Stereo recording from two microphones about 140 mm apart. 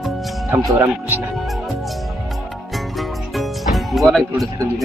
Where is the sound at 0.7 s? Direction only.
25° right (ahead or behind).